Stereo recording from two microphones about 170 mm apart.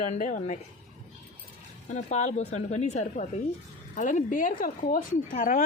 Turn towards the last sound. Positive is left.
turn(degrees=50)  # may be behind; listen again after turning